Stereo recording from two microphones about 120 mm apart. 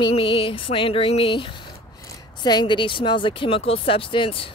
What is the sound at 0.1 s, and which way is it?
Speech, 50° left (ahead or behind).